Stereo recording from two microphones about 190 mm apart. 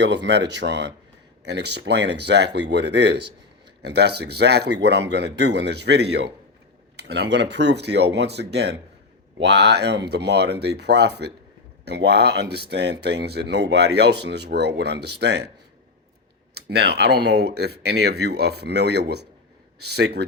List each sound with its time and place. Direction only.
0.0 s speech: 65° right (ahead or behind)
16.6 s speech: 60° right (ahead or behind)